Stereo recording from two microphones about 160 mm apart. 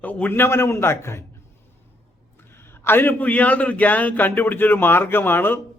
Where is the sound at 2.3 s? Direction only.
15° left (ahead or behind).